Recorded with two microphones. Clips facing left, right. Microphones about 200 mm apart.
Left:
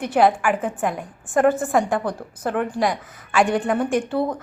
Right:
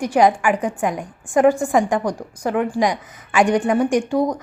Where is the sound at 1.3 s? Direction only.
15° right (ahead or behind).